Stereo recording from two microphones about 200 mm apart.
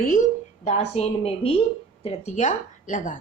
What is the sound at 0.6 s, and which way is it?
A woman's voice, 30° left (ahead or behind).